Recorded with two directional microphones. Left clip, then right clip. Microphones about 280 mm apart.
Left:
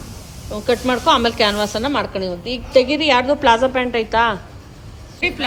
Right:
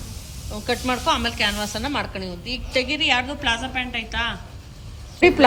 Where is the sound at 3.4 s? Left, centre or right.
Centre.